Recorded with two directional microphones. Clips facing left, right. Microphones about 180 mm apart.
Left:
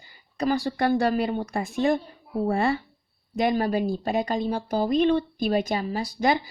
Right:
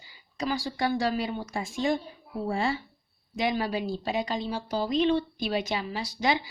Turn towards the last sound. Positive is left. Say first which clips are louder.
# left 4 dB
turn(degrees=50)  # may be behind; listen again after turning